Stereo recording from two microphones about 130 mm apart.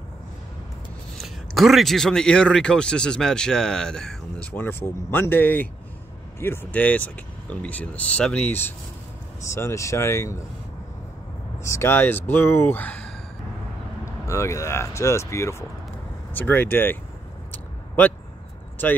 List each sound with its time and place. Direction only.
1.1 s a man's voice: centre (ahead or behind); by 10.4 s 20° left (ahead or behind)
11.6 s speech: 20° left (ahead or behind)
14.2 s speech: 20° left (ahead or behind)
17.5 s a sound: 15° left (ahead or behind)